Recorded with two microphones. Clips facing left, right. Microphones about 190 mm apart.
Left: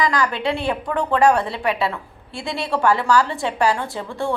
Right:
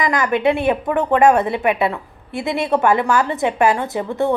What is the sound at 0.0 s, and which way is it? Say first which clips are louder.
A woman's voice: right 4 dB; 20° right (ahead or behind).